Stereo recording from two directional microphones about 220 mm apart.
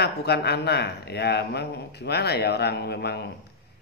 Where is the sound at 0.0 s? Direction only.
50° left (ahead or behind).